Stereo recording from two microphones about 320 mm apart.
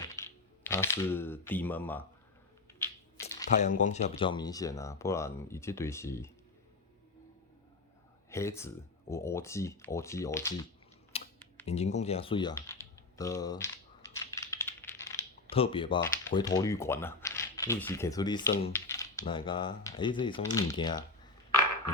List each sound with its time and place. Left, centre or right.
0.0 s speech: centre
3.6 s speech: left
8.3 s speech: centre
11.1 s computer keyboard: centre
11.6 s speech: centre
14.0 s typing: centre
19.2 s speech: centre